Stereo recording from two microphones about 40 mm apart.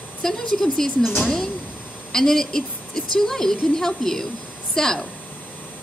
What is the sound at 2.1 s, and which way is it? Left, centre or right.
A woman's voice, centre.